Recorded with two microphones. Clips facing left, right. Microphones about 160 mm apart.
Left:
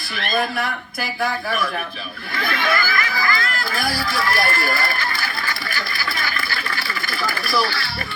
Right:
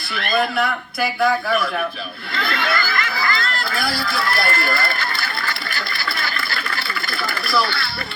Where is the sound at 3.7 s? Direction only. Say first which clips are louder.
Left 1 dB; 40° left (ahead or behind).